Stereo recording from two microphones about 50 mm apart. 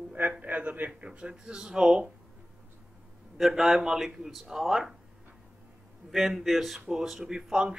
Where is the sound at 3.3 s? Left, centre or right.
Centre.